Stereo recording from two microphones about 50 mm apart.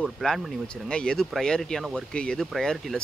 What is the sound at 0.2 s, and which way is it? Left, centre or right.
Speech, centre.